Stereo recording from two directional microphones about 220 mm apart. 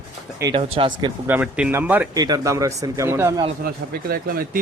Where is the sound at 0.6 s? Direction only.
20° right (ahead or behind).